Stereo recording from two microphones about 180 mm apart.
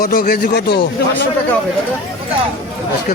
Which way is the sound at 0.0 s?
50° left (ahead or behind).